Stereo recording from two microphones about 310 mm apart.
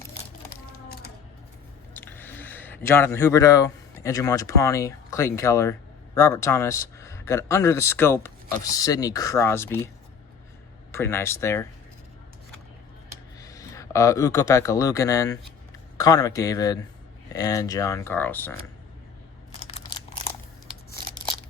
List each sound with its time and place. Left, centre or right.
1.9 s speech: centre
10.9 s speech: centre
13.4 s a man's voice: centre
19.6 s a sound: centre